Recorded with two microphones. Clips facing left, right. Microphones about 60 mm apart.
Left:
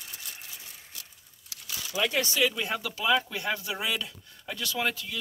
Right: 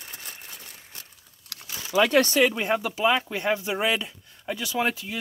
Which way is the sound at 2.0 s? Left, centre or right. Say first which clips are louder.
Right 7 dB; right.